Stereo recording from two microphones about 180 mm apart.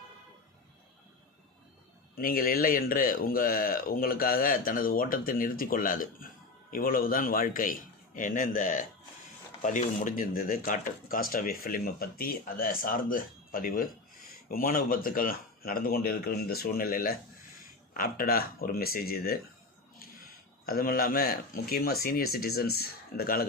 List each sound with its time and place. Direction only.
2.1 s speech: 55° left (ahead or behind)